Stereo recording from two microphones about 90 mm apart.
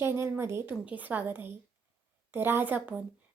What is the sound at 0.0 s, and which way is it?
Speech, 30° right (ahead or behind).